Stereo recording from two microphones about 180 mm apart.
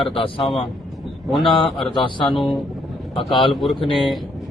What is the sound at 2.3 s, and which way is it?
Speech, centre (ahead or behind).